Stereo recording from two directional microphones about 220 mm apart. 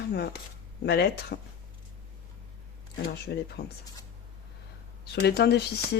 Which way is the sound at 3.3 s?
50° left (ahead or behind).